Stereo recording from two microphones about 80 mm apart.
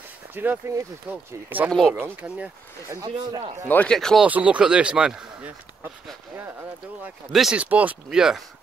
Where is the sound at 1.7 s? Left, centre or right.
Centre.